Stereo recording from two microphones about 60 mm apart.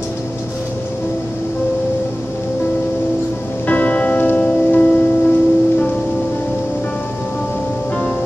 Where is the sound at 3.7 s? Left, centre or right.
Left.